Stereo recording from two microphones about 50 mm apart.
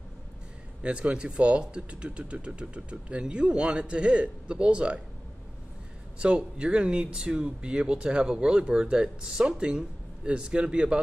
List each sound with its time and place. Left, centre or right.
0.8 s speech: right
6.1 s speech: right